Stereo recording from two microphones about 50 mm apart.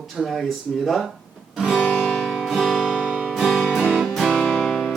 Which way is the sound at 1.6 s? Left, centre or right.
Centre.